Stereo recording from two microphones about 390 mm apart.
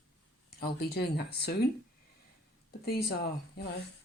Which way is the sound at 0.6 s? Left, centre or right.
Left.